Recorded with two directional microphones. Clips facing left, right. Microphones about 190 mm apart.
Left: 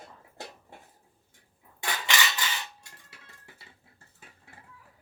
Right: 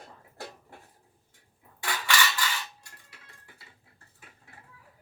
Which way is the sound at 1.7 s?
20° left (ahead or behind).